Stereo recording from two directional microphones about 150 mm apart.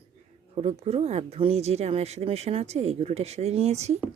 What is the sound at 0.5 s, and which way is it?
A woman's voice, 45° right (ahead or behind).